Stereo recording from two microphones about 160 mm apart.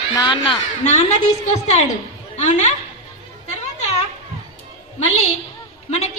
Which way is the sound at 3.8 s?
45° left (ahead or behind).